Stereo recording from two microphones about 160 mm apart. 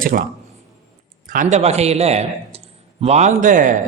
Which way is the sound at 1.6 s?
40° right (ahead or behind).